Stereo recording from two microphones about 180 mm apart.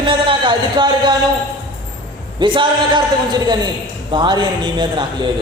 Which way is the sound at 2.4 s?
25° right (ahead or behind).